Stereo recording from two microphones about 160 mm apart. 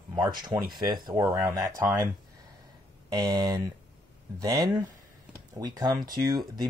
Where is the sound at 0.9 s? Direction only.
20° right (ahead or behind).